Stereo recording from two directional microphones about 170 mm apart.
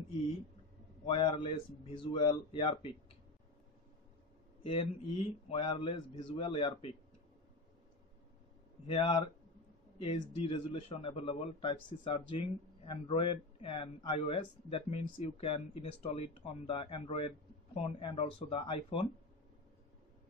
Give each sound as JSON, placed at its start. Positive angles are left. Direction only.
{"t": 1.0, "sound": "a man's voice", "side_deg": 30}
{"t": 4.6, "sound": "a man's voice", "side_deg": 30}
{"t": 8.8, "sound": "a man's voice", "side_deg": 35}